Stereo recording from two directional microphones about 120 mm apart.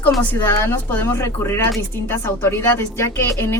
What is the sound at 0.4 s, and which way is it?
A woman's voice, 20° left (ahead or behind).